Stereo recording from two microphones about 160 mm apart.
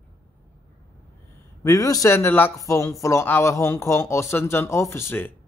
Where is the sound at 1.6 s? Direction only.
20° left (ahead or behind).